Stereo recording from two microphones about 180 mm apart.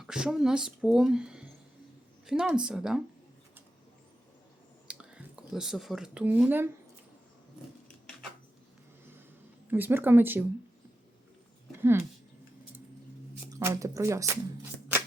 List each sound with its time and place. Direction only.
0.0 s speech: 5° right (ahead or behind)
4.9 s speech: 5° right (ahead or behind)
9.6 s speech: 10° right (ahead or behind)
11.8 s speech: 15° right (ahead or behind)
13.5 s speech: 15° right (ahead or behind)